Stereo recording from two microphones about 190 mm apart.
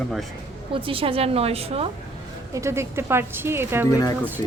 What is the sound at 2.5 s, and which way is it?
A woman's voice, 15° right (ahead or behind).